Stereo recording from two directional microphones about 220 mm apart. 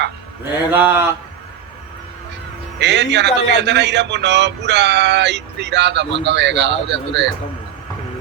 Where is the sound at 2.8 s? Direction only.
50° right (ahead or behind).